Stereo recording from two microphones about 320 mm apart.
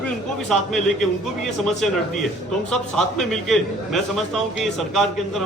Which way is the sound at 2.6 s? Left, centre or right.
Centre.